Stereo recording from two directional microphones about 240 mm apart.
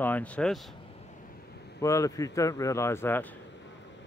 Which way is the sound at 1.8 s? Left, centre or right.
Centre.